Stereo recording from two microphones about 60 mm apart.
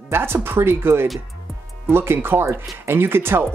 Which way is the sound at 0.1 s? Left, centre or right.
Right.